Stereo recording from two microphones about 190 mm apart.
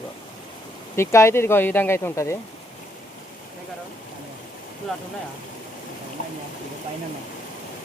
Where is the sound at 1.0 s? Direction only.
15° left (ahead or behind).